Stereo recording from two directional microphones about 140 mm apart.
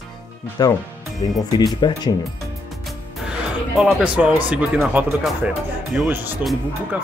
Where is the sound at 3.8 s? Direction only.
5° right (ahead or behind).